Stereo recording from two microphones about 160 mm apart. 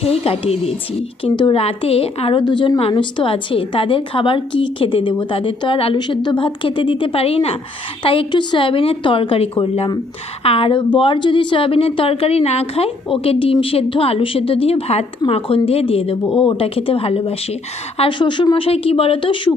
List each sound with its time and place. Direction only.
0.0 s a woman's voice: 35° left (ahead or behind)